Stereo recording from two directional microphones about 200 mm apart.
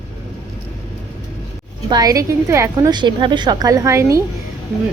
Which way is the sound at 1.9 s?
20° right (ahead or behind).